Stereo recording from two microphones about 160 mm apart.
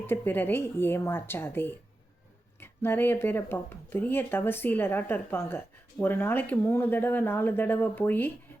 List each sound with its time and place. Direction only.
0.0 s speech: 10° left (ahead or behind)